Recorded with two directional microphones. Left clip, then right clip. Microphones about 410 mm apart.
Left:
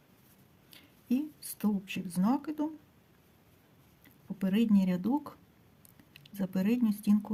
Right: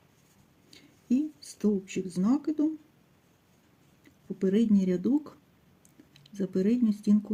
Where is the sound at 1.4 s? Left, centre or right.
Left.